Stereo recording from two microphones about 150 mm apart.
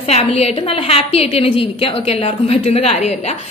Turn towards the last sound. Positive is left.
turn(degrees=45)  # may be behind; listen again after turning